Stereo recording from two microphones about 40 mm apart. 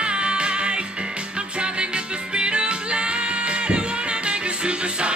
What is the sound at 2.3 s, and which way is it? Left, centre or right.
Music, right.